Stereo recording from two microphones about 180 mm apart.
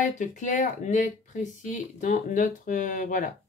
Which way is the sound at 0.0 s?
45° left (ahead or behind).